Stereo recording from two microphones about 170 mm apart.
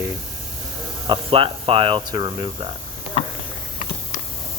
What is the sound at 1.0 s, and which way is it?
Speech, 30° right (ahead or behind).